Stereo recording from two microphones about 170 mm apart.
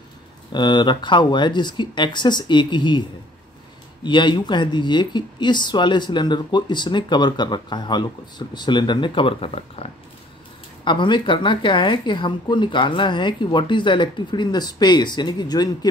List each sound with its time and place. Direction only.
0.5 s speech: 25° left (ahead or behind)
4.0 s speech: 25° left (ahead or behind)